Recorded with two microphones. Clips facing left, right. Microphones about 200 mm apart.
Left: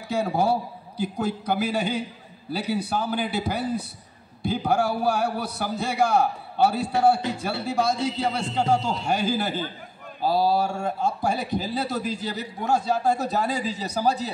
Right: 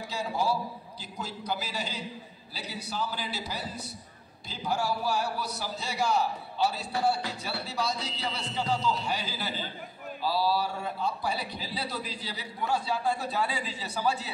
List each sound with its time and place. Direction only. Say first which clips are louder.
0.1 s a man's voice: left 7 dB; 55° left (ahead or behind); by 14.3 s 40° left (ahead or behind)